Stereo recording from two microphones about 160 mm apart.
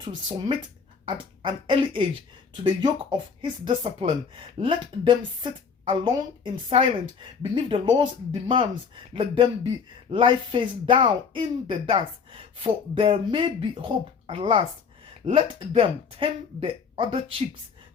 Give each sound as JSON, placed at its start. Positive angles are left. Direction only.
{"t": 1.0, "sound": "a woman's voice", "side_deg": -30}
{"t": 9.1, "sound": "a woman's voice", "side_deg": -30}